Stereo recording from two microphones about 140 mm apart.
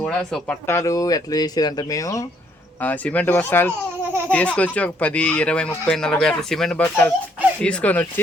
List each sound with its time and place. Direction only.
0.0 s speech: centre (ahead or behind)
0.7 s speech: 20° left (ahead or behind)
2.8 s speech: 10° left (ahead or behind)